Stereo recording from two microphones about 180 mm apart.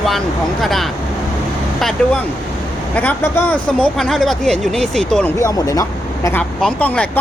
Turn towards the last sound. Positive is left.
turn(degrees=10)  # may be behind; listen again after turning